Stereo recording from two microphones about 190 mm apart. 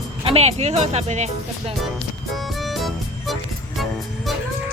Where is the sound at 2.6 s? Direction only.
Centre (ahead or behind).